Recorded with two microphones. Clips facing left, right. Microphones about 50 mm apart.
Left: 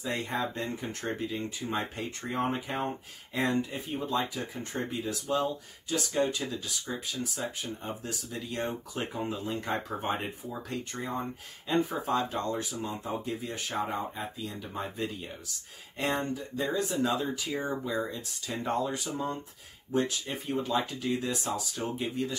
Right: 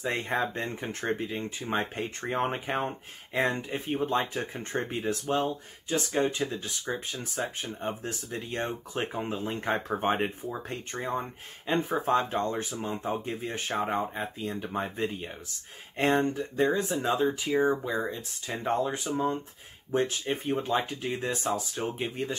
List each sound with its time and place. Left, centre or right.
0.0 s speech: right